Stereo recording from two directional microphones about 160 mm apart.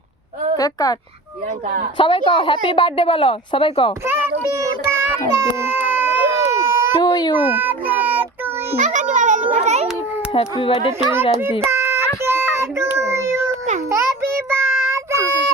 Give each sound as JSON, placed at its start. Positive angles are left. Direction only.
{"t": 0.5, "sound": "a woman's voice", "side_deg": 25}
{"t": 2.0, "sound": "a woman's voice", "side_deg": 35}
{"t": 4.0, "sound": "child singing", "side_deg": -15}
{"t": 6.4, "sound": "baby cry", "side_deg": -20}
{"t": 7.0, "sound": "baby cry", "side_deg": 25}
{"t": 7.3, "sound": "child singing", "side_deg": -10}
{"t": 8.8, "sound": "a sound", "side_deg": -50}
{"t": 10.3, "sound": "a woman's voice", "side_deg": 35}
{"t": 11.7, "sound": "child singing", "side_deg": -15}